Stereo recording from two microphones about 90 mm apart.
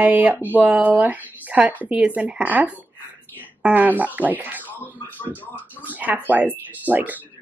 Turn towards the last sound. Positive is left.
turn(degrees=-20)  # may be behind; listen again after turning